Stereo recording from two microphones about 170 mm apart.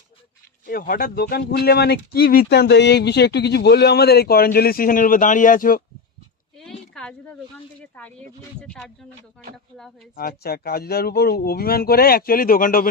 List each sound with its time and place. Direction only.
0.6 s speech: 55° left (ahead or behind)
6.7 s speech: 5° left (ahead or behind)
10.2 s speech: 65° left (ahead or behind)